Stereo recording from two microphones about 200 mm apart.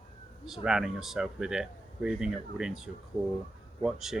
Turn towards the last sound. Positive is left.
turn(degrees=0)  # may be behind; listen again after turning